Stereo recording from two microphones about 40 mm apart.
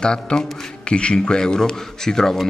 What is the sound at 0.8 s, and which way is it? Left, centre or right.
A man's voice, left.